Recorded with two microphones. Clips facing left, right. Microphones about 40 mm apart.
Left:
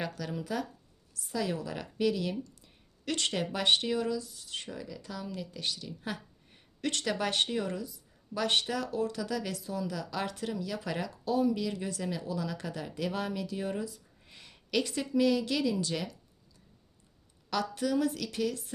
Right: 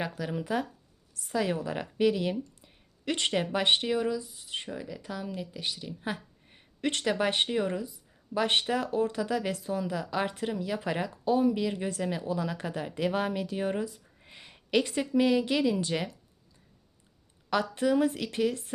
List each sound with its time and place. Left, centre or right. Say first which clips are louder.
0.0 s speech: right 3 dB; centre
17.5 s speech: right 4 dB; right